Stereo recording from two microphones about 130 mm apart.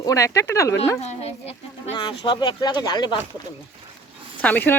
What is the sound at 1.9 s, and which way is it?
Speech, 35° left (ahead or behind).